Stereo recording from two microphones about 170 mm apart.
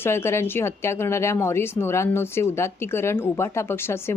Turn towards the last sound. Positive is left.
turn(degrees=15)  # may be behind; listen again after turning